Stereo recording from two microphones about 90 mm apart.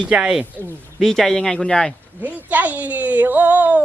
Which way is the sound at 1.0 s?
5° left (ahead or behind).